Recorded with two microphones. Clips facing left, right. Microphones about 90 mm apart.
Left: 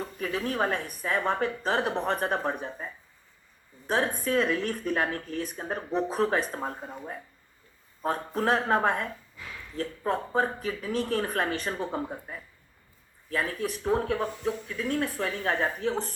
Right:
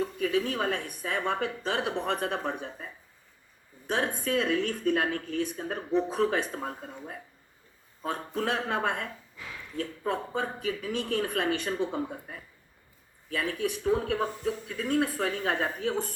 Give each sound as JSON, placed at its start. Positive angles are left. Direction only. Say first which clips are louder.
{"t": 0.0, "sound": "speech", "louder": "right 4 dB", "side_deg": 45}
{"t": 6.5, "sound": "speech", "louder": "left 2 dB", "side_deg": 70}
{"t": 8.0, "sound": "speech", "louder": "left 4 dB", "side_deg": 45}
{"t": 13.3, "sound": "speech", "louder": "even", "side_deg": 45}